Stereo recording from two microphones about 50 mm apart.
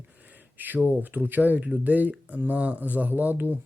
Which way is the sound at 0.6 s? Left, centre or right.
Right.